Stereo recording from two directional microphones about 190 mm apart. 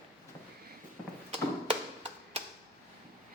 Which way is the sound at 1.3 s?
35° right (ahead or behind).